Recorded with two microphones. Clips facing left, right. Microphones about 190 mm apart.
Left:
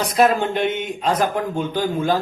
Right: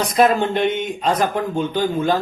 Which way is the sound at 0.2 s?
5° left (ahead or behind).